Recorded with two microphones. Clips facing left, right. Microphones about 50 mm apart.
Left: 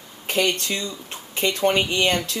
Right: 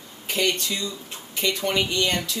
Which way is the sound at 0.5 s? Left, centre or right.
Left.